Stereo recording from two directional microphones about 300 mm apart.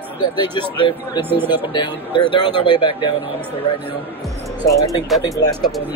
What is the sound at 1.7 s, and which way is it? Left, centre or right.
A man's voice, centre.